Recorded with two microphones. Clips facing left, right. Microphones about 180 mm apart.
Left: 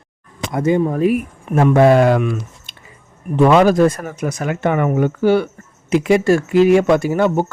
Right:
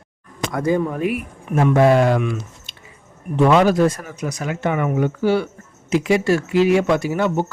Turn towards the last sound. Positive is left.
turn(degrees=50)  # may be behind; listen again after turning